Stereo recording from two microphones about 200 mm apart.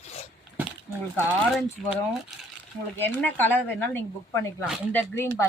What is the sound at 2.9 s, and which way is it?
A woman's voice, 10° left (ahead or behind).